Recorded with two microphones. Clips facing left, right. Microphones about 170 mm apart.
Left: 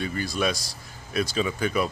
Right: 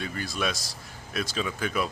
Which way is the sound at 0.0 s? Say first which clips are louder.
Left 4 dB; centre (ahead or behind).